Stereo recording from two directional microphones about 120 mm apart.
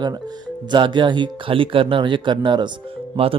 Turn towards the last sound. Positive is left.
turn(degrees=-50)  # may be behind; listen again after turning